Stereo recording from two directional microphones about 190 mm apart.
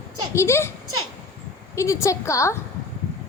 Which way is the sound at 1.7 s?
15° left (ahead or behind).